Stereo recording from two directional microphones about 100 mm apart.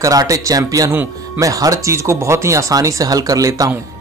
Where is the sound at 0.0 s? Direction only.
35° right (ahead or behind).